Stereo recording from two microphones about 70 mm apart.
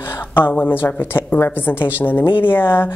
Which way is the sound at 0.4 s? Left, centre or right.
Left.